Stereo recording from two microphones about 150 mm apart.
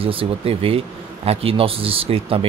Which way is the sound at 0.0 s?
40° right (ahead or behind).